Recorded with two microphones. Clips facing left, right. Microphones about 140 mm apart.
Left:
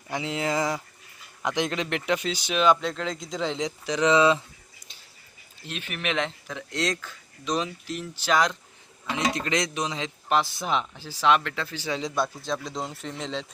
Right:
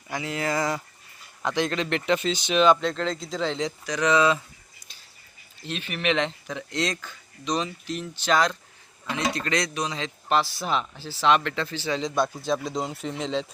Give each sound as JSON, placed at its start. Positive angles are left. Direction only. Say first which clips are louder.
{"t": 0.1, "sound": "a man's voice", "louder": "even", "side_deg": 20}
{"t": 5.6, "sound": "a man's voice", "louder": "right 4 dB", "side_deg": 10}